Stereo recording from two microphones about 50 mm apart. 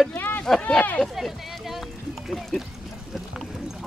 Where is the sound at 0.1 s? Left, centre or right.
Left.